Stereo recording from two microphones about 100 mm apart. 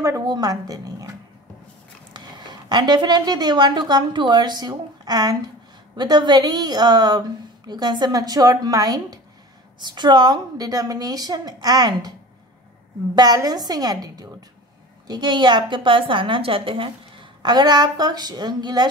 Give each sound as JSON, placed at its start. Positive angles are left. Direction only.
{"t": 0.0, "sound": "a woman's voice", "side_deg": -30}
{"t": 2.1, "sound": "a woman's voice", "side_deg": -45}
{"t": 13.1, "sound": "a woman's voice", "side_deg": -40}